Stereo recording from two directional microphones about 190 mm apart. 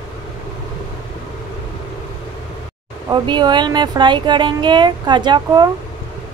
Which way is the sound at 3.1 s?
25° right (ahead or behind).